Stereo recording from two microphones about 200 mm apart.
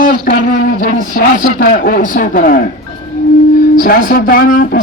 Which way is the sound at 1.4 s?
45° left (ahead or behind).